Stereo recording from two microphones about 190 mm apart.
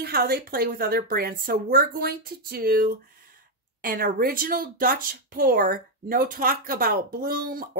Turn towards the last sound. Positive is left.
turn(degrees=-50)  # may be behind; listen again after turning